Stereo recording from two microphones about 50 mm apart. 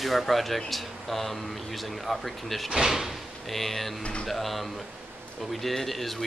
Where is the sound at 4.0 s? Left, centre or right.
Left.